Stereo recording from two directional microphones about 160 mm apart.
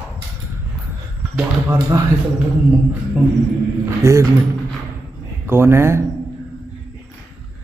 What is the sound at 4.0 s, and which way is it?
Speech, 20° right (ahead or behind).